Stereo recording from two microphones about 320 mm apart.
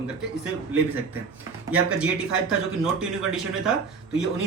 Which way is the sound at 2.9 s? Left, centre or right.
Centre.